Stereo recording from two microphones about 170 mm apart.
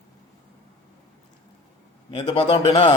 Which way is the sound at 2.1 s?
30° left (ahead or behind).